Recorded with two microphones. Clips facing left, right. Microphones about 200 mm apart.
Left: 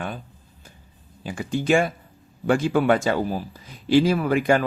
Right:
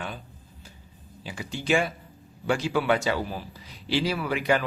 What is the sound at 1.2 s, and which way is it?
A man's voice, 50° left (ahead or behind).